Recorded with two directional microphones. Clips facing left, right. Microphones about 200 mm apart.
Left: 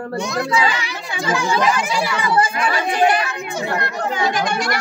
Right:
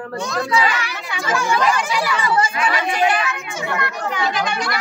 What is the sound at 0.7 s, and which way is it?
Music, 25° left (ahead or behind).